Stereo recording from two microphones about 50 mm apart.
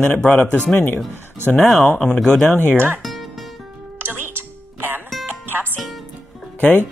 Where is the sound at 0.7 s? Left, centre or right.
Left.